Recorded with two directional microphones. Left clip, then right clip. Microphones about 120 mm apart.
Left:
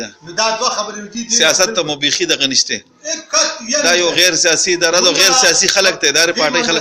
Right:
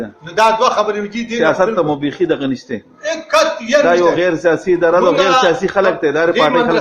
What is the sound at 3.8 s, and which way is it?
Speech, 25° right (ahead or behind).